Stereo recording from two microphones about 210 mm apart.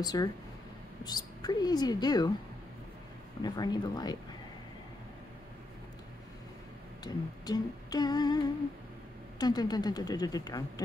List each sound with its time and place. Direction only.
0.0 s speech: 20° left (ahead or behind)
1.0 s humming: 20° left (ahead or behind)
3.4 s humming: 20° left (ahead or behind)
7.0 s humming: 20° left (ahead or behind)